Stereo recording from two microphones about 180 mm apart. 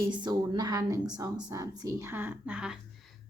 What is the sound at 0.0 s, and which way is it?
A woman's voice, 25° right (ahead or behind).